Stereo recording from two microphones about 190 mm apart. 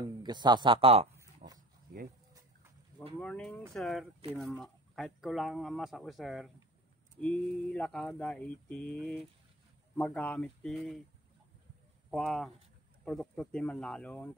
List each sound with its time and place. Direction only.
0.2 s speech: 25° right (ahead or behind)
1.4 s dog: 45° right (ahead or behind)
3.2 s speech: 5° left (ahead or behind)
12.1 s speech: centre (ahead or behind)